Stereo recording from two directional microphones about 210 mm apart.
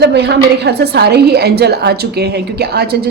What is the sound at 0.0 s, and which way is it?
A woman's voice, 50° right (ahead or behind).